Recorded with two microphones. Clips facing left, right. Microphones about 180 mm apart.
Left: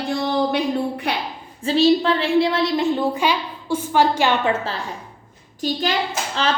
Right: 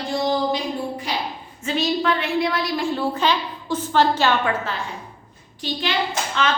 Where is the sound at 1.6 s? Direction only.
30° left (ahead or behind).